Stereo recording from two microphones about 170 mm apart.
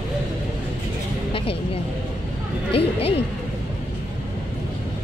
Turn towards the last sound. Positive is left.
turn(degrees=35)  # may be behind; listen again after turning